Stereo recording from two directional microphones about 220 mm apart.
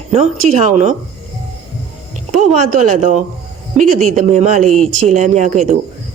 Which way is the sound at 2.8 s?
35° right (ahead or behind).